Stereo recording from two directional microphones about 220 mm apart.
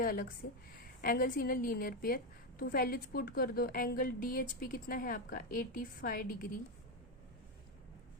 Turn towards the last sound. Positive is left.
turn(degrees=40)  # may be behind; listen again after turning